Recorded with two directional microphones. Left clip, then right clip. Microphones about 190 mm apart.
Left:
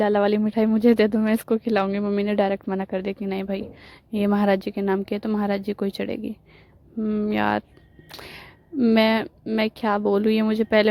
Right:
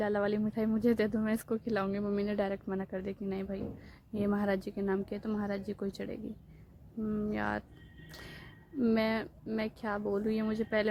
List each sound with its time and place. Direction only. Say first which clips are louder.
0.0 s a woman's voice: left 12 dB; 45° left (ahead or behind)